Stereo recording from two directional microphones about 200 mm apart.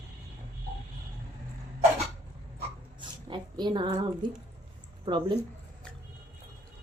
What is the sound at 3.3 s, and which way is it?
Speech, 25° right (ahead or behind).